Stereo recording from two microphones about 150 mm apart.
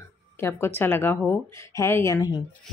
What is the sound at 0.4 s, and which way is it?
Speech, 15° left (ahead or behind).